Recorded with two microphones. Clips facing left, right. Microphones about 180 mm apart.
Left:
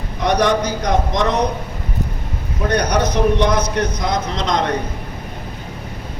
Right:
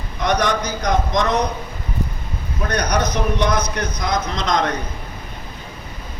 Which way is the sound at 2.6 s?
30° left (ahead or behind).